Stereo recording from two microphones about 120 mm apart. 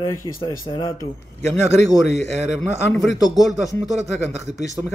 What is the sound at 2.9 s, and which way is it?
Speech, 30° left (ahead or behind).